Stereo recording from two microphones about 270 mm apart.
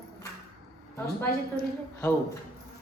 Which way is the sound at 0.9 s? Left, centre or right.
Centre.